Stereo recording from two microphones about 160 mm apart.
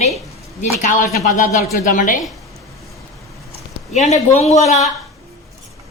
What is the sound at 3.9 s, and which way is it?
Speech, 45° left (ahead or behind).